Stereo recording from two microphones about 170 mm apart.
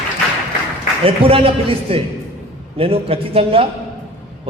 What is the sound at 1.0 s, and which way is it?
A man's voice, 35° right (ahead or behind).